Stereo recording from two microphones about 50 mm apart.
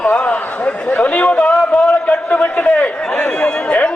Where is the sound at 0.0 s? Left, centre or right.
Left.